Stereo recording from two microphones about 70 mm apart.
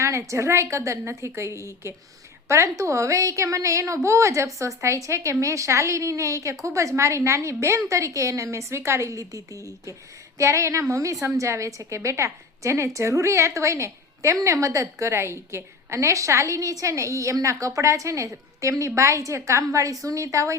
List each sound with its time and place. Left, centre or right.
0.0 s a woman's voice: right